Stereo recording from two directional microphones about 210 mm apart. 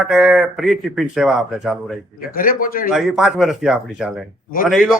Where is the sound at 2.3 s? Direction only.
40° left (ahead or behind).